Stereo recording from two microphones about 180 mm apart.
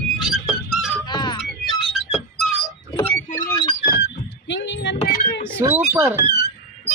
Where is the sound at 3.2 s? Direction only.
45° left (ahead or behind).